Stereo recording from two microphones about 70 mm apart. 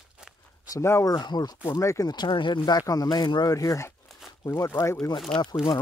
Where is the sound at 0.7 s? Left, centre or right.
Left.